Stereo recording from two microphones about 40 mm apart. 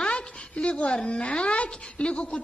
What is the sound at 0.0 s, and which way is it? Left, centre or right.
Speech, left.